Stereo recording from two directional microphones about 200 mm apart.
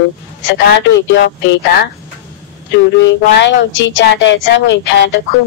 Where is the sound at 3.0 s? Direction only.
65° left (ahead or behind).